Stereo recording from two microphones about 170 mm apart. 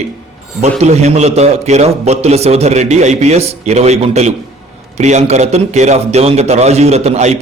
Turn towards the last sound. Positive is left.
turn(degrees=-40)  # may be behind; listen again after turning